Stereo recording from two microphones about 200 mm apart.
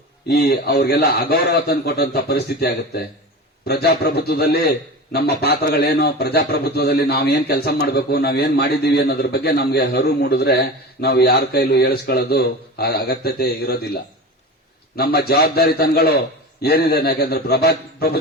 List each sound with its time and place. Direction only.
0.3 s a man's voice: 50° left (ahead or behind)